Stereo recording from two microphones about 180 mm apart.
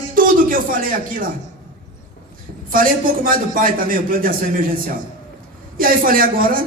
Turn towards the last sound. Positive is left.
turn(degrees=-50)  # may be behind; listen again after turning